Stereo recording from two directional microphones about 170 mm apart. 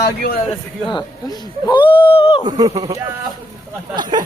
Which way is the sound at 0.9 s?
25° left (ahead or behind).